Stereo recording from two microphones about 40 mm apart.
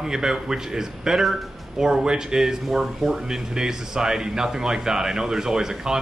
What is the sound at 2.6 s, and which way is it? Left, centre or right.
Speech, centre.